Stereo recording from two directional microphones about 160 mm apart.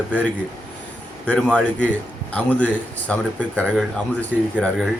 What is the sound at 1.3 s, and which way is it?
A man's voice, 5° left (ahead or behind).